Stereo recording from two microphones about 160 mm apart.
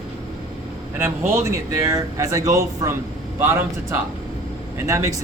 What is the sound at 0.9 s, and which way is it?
A man's voice, 15° right (ahead or behind).